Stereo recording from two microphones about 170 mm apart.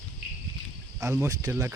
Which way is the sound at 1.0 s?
15° right (ahead or behind).